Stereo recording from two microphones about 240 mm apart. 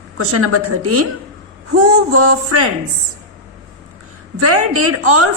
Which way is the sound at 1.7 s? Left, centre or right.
Right.